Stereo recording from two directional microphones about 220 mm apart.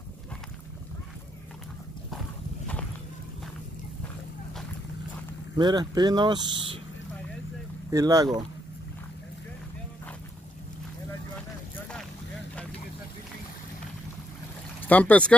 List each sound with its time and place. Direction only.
5.6 s speech: 20° right (ahead or behind)
7.9 s speech: 15° right (ahead or behind)
14.9 s speech: 5° left (ahead or behind)